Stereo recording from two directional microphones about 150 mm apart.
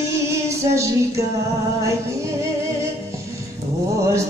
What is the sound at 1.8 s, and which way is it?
Music, 20° right (ahead or behind).